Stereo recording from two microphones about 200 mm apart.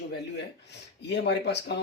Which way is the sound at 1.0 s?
60° left (ahead or behind).